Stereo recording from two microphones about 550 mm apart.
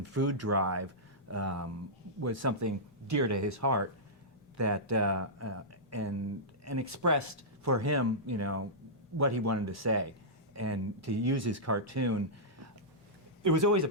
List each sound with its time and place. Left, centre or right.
0.0 s speech: right